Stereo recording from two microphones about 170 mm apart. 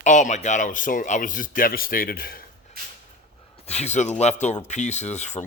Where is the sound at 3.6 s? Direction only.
40° left (ahead or behind).